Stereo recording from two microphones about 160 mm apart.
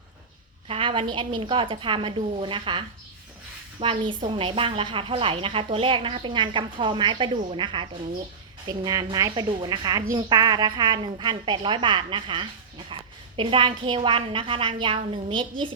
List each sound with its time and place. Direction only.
0.7 s a woman's voice: 30° right (ahead or behind)